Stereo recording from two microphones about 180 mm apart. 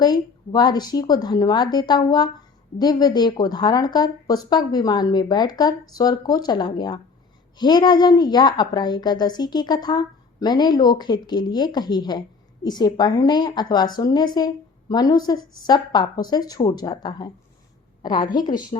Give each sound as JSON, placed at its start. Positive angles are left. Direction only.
{"t": 0.0, "sound": "a woman's voice", "side_deg": 20}